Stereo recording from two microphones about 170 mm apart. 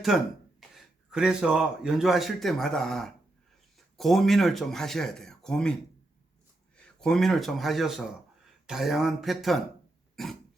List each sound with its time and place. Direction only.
0.1 s a man's voice: centre (ahead or behind)
7.0 s a man's voice: centre (ahead or behind)